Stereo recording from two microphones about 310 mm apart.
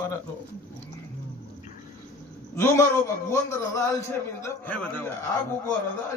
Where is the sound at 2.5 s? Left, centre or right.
Centre.